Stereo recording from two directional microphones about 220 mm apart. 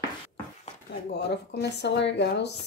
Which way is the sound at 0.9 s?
50° left (ahead or behind).